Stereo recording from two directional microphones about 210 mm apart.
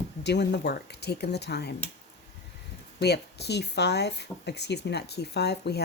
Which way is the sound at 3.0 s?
50° left (ahead or behind).